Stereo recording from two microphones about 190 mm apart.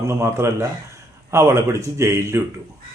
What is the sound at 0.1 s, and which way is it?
A man's voice, 15° right (ahead or behind).